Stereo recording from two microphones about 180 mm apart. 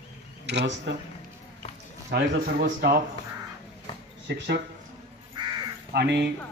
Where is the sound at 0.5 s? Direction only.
75° right (ahead or behind).